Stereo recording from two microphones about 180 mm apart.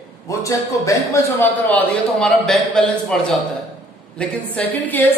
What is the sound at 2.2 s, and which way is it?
A man's voice, 5° left (ahead or behind).